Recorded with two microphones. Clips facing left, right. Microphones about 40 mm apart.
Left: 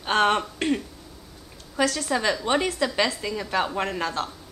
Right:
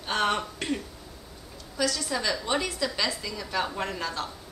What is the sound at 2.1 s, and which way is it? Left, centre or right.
A woman's voice, left.